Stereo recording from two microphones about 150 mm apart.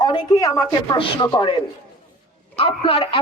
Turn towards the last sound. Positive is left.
turn(degrees=40)  # may be behind; listen again after turning